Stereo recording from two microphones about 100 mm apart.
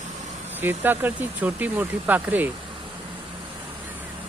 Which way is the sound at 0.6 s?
20° right (ahead or behind).